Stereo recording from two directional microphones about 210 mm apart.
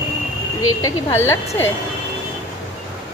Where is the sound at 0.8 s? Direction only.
10° left (ahead or behind).